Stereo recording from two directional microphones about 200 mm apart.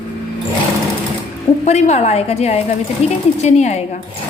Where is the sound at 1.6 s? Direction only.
35° left (ahead or behind).